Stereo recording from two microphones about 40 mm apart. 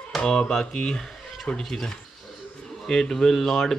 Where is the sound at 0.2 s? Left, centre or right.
Centre.